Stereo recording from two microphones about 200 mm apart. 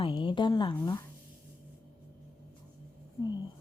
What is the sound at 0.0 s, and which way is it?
Speech, 25° left (ahead or behind).